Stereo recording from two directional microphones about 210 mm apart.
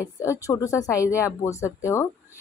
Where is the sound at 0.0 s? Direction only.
15° left (ahead or behind).